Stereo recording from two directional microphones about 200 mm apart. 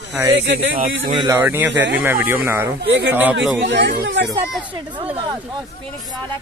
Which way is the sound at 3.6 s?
60° right (ahead or behind).